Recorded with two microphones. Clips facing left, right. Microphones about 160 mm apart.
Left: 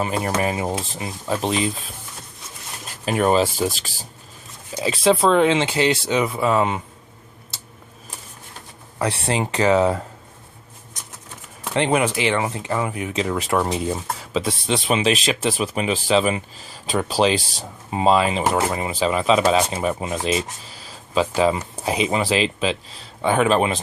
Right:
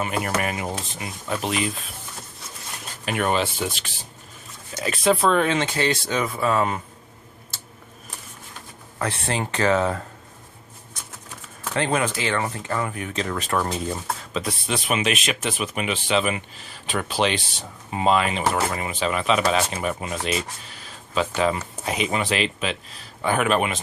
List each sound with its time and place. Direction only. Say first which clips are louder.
0.0 s speech: left 3 dB; 30° left (ahead or behind)
3.1 s speech: left 5 dB; 35° left (ahead or behind)
4.8 s speech: left 3 dB; 30° left (ahead or behind)
6.6 s speech: left 2 dB; centre (ahead or behind)
9.0 s speech: left 4 dB; 15° left (ahead or behind)
11.6 s speech: left 4 dB; 20° left (ahead or behind)
14.7 s speech: left 4 dB; 30° left (ahead or behind)